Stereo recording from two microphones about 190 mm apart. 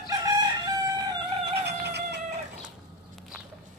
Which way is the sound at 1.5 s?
60° right (ahead or behind).